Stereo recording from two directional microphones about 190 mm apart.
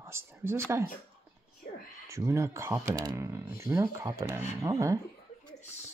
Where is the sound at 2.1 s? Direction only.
15° right (ahead or behind).